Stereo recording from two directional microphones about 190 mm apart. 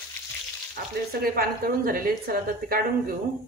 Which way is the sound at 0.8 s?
50° right (ahead or behind).